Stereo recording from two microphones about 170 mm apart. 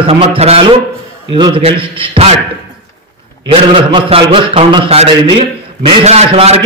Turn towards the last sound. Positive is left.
turn(degrees=-40)  # may be behind; listen again after turning